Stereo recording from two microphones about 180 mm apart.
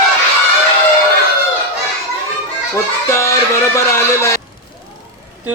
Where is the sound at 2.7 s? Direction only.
15° left (ahead or behind).